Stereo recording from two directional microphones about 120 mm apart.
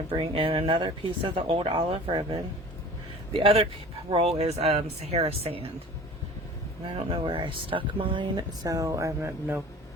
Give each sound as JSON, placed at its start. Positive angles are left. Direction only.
{"t": 0.1, "sound": "speech", "side_deg": -50}
{"t": 6.8, "sound": "speech", "side_deg": -50}